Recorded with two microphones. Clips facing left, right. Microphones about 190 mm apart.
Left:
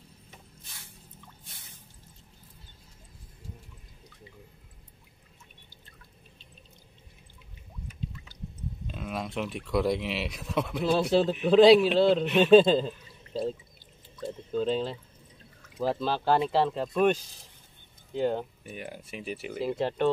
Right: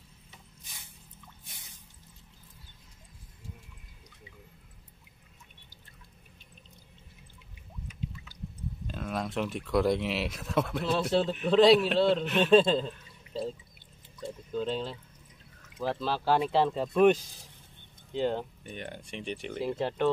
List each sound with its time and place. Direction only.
1.4 s drip: 15° right (ahead or behind)
8.8 s speech: centre (ahead or behind)
14.6 s speech: centre (ahead or behind)
18.1 s speech: 5° left (ahead or behind)